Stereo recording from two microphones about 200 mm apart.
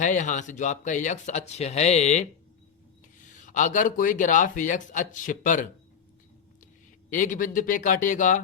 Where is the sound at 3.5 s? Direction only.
40° left (ahead or behind).